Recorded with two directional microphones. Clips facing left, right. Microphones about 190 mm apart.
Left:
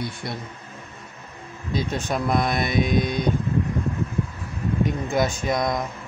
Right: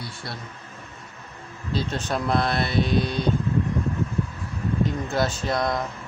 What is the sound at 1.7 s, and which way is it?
Speech, 15° left (ahead or behind).